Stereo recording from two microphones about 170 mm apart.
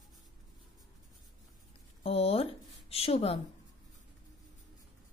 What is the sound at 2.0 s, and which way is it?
Speech, 35° left (ahead or behind).